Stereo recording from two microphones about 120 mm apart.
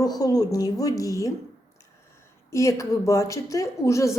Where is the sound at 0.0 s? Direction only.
30° left (ahead or behind).